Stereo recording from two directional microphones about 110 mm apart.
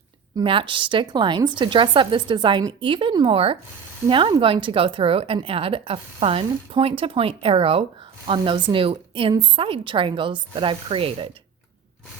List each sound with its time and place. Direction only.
0.4 s a woman's voice: 50° right (ahead or behind)